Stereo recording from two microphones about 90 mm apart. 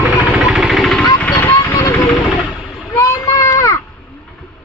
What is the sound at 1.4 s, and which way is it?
Vehicle, 20° left (ahead or behind).